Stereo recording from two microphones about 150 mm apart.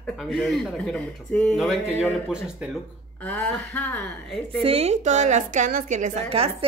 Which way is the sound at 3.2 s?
10° left (ahead or behind).